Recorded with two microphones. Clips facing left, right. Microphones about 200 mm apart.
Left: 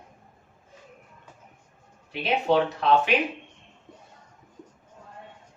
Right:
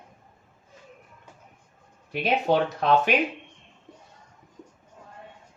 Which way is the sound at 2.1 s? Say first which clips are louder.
Even; 45° right (ahead or behind).